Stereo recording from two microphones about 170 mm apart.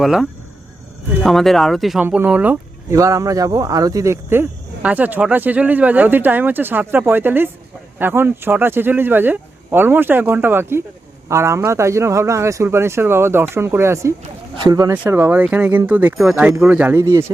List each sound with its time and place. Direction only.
0.0 s speech: centre (ahead or behind); by 14.9 s 20° right (ahead or behind)
14.9 s speech: 10° right (ahead or behind)